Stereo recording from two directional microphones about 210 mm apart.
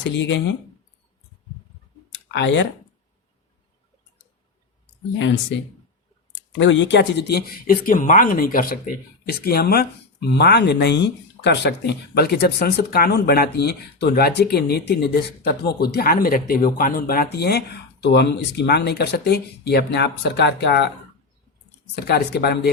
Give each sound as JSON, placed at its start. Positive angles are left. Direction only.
{"t": 0.0, "sound": "speech", "side_deg": 60}
{"t": 2.1, "sound": "clicking", "side_deg": 60}
{"t": 6.6, "sound": "speech", "side_deg": 60}
{"t": 21.9, "sound": "speech", "side_deg": 50}